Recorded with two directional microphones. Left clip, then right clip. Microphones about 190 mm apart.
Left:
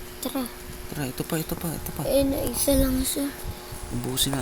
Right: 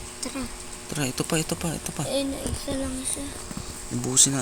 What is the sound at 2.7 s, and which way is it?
Speech, 70° left (ahead or behind).